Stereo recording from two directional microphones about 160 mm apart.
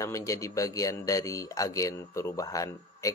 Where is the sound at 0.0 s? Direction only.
20° left (ahead or behind).